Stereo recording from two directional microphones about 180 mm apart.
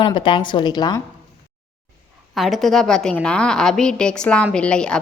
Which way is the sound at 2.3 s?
Centre (ahead or behind).